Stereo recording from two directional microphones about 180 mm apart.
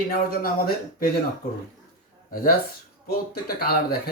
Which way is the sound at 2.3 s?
50° left (ahead or behind).